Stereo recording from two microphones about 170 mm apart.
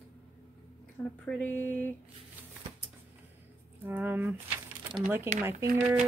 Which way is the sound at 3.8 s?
10° right (ahead or behind).